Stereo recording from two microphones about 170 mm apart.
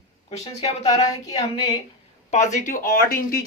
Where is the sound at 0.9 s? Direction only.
20° left (ahead or behind).